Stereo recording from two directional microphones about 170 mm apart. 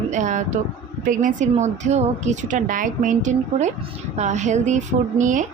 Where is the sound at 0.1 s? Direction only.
45° right (ahead or behind).